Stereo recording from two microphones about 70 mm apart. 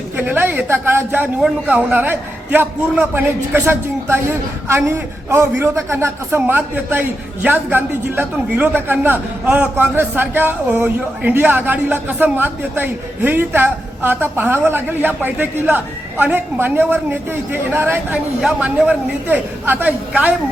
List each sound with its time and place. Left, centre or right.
0.2 s a sound: right
1.6 s speech: right
5.3 s a man's voice: right
6.4 s speech: right
18.6 s speech: centre